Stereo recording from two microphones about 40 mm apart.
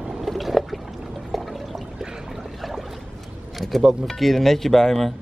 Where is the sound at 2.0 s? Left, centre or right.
Centre.